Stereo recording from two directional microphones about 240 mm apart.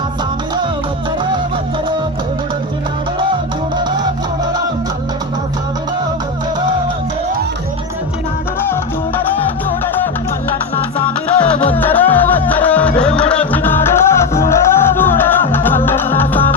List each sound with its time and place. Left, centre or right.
9.8 s music: centre
10.9 s music: left
11.7 s music: centre